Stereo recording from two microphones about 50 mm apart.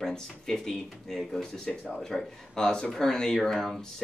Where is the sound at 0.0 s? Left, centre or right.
Centre.